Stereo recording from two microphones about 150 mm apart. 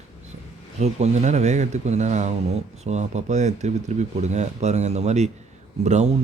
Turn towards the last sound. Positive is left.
turn(degrees=-50)  # may be behind; listen again after turning